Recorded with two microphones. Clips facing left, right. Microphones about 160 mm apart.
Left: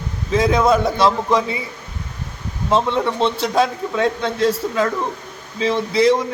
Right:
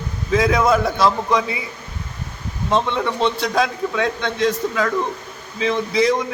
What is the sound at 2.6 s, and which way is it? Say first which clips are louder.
Speech: left 2 dB; 5° left (ahead or behind).